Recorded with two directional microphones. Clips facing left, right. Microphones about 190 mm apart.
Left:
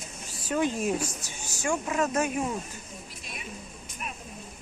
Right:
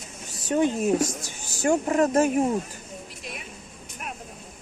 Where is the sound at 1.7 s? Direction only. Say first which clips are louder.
Right 6 dB; 40° right (ahead or behind).